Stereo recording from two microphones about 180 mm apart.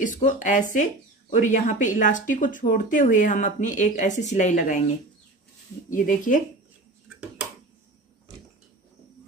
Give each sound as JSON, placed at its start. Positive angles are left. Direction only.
{"t": 0.0, "sound": "speech", "side_deg": 45}
{"t": 5.9, "sound": "speech", "side_deg": 45}